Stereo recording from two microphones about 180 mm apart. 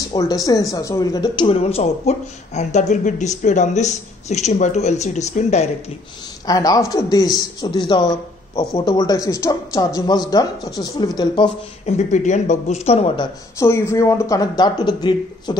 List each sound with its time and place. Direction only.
0.1 s speech: 20° left (ahead or behind); by 5.7 s 40° left (ahead or behind)
6.4 s a man's voice: 20° left (ahead or behind)
11.8 s speech: 40° left (ahead or behind)
13.7 s a man's voice: 15° left (ahead or behind)